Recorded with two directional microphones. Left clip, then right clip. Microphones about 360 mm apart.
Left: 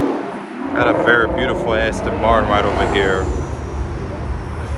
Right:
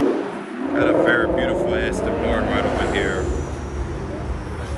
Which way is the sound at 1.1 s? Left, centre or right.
Left.